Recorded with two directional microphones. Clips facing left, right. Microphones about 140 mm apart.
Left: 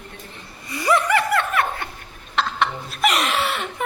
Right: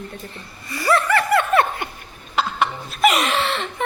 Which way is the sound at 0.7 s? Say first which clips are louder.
Even; 20° left (ahead or behind).